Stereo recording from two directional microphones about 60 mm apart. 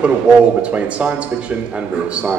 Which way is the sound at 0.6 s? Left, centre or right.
Right.